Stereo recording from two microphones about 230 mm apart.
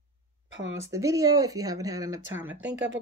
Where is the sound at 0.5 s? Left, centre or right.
Right.